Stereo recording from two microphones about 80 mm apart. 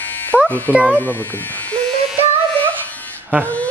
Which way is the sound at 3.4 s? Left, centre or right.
Centre.